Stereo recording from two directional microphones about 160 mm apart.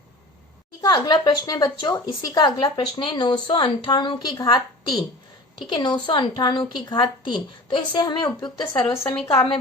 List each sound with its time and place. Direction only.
0.8 s a woman's voice: 25° left (ahead or behind)